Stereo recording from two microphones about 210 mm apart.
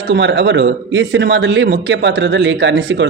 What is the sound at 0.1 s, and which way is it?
A man's voice, 60° right (ahead or behind).